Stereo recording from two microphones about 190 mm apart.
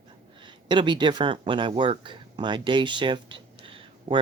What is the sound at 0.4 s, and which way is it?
Speech, 25° right (ahead or behind).